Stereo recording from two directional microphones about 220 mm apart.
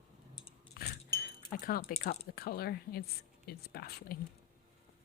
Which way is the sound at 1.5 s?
40° left (ahead or behind).